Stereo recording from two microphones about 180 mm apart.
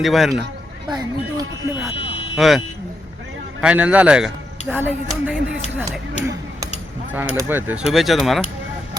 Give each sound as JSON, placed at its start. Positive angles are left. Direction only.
{"t": 0.0, "sound": "speech", "side_deg": 0}
{"t": 0.9, "sound": "speech", "side_deg": -20}
{"t": 2.3, "sound": "speech", "side_deg": 0}
{"t": 3.6, "sound": "speech", "side_deg": -5}
{"t": 7.1, "sound": "speech", "side_deg": -10}